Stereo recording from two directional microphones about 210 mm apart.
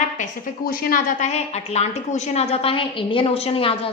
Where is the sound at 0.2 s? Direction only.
45° left (ahead or behind).